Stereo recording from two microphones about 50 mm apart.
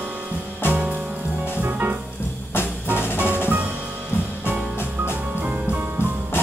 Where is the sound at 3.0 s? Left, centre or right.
Left.